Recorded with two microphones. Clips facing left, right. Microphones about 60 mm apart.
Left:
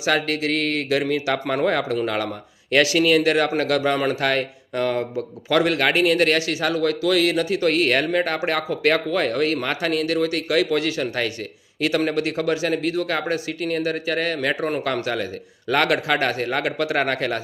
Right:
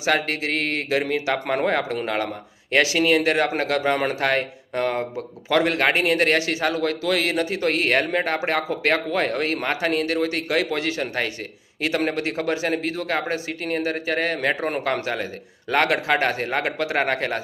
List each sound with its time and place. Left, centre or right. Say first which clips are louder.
0.0 s a man's voice: left 1 dB; right